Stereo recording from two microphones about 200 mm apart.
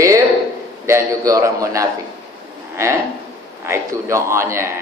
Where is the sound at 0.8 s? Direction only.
15° right (ahead or behind).